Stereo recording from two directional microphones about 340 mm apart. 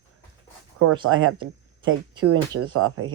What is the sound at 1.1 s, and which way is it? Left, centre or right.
Speech, right.